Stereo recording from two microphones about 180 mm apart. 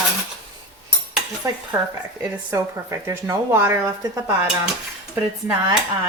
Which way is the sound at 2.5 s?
15° right (ahead or behind).